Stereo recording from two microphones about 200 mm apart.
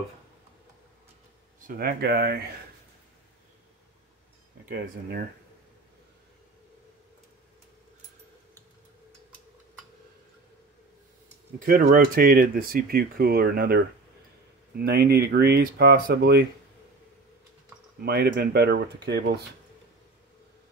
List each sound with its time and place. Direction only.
1.8 s speech: 50° right (ahead or behind)
4.6 s speech: 50° right (ahead or behind)
11.6 s speech: 45° right (ahead or behind)
18.0 s speech: 55° right (ahead or behind)